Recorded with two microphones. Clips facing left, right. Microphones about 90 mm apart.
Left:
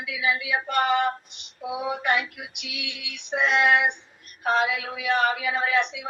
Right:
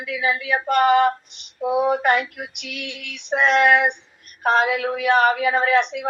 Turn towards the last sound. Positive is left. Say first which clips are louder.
# right 6 dB
turn(degrees=-55)  # may be behind; listen again after turning